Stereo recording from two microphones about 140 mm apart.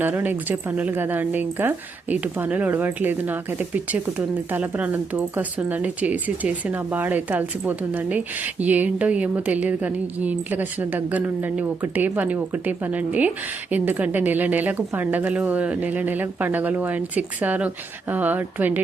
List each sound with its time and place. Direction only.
0.0 s a woman's voice: 15° right (ahead or behind)